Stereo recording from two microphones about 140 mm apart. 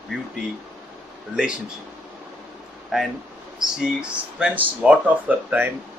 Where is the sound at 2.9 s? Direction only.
5° right (ahead or behind).